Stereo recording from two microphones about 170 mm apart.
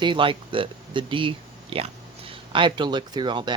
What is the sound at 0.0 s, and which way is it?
Speech, 30° right (ahead or behind).